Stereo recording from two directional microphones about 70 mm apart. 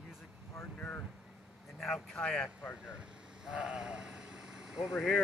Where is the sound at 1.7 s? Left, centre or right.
Centre.